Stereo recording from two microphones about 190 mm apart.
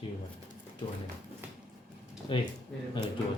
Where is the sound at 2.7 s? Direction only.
5° left (ahead or behind).